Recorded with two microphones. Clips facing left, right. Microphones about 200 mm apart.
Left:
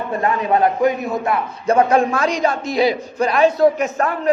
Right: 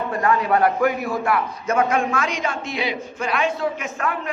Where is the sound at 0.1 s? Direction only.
25° left (ahead or behind).